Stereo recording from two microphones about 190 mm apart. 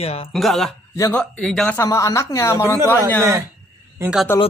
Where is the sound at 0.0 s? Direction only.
30° left (ahead or behind).